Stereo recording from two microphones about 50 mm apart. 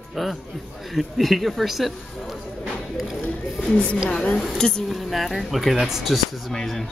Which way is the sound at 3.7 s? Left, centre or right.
Left.